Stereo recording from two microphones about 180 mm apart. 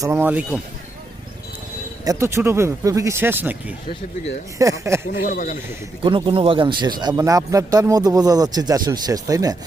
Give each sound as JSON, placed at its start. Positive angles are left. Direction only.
{"t": 0.0, "sound": "speech", "side_deg": -15}
{"t": 2.0, "sound": "speech", "side_deg": -15}
{"t": 5.2, "sound": "a man's voice", "side_deg": 45}
{"t": 6.0, "sound": "speech", "side_deg": -30}